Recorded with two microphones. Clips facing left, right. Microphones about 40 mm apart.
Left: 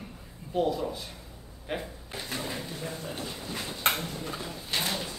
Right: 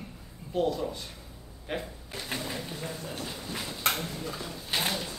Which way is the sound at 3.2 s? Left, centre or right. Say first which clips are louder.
Even; centre.